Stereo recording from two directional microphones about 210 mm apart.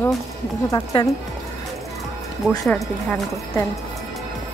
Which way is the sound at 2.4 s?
5° left (ahead or behind).